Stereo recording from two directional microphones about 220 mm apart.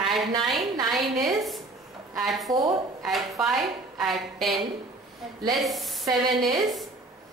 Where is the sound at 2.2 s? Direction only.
Centre (ahead or behind).